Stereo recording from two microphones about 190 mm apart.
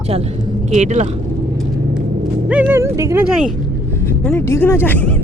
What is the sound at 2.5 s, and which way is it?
Speech, 5° right (ahead or behind).